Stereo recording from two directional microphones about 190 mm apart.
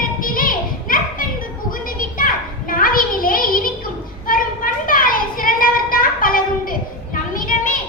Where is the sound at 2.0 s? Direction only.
45° left (ahead or behind).